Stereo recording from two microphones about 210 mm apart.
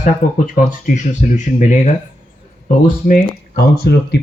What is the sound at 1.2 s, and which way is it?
Speech, 35° left (ahead or behind).